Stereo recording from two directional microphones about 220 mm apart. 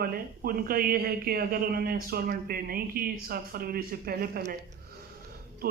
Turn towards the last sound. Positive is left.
turn(degrees=-40)  # may be behind; listen again after turning